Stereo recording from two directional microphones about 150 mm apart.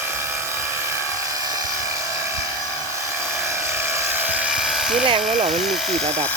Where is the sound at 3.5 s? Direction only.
20° right (ahead or behind); by 5.0 s centre (ahead or behind).